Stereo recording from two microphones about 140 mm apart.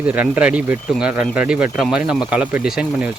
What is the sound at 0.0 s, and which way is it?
Speech, 10° right (ahead or behind).